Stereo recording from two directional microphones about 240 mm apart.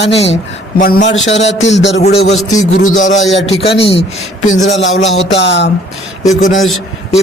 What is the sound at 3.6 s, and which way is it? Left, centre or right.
A man's voice, left.